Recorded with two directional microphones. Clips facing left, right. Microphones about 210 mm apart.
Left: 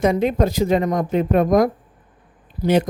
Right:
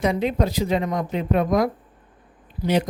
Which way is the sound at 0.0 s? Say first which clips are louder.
Left 4 dB; 50° left (ahead or behind).